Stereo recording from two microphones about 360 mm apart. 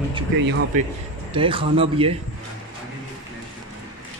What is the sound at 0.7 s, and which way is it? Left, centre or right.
A man's voice, right.